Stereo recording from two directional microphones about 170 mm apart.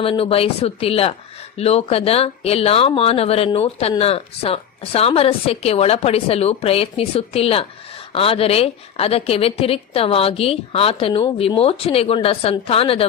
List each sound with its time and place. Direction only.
0.0 s a woman's voice: 35° left (ahead or behind)